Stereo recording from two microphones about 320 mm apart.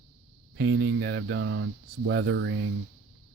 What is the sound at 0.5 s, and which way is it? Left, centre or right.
Speech, right.